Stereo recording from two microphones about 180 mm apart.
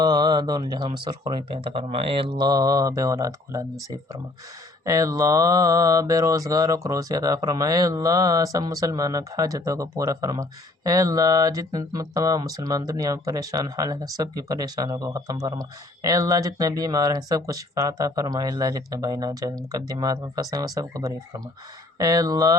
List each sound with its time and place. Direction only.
0.0 s speech: 25° right (ahead or behind)
4.9 s speech: 20° right (ahead or behind)